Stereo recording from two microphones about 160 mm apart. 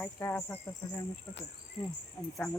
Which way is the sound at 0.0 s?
15° left (ahead or behind).